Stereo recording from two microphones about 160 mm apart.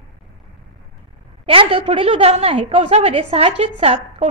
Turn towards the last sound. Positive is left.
turn(degrees=-40)  # may be behind; listen again after turning